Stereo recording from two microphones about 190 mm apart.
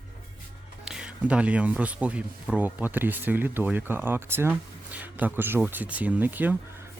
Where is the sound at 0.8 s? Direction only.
5° right (ahead or behind).